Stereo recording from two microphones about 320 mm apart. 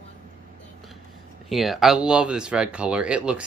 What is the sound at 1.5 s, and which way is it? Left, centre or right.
Speech, centre.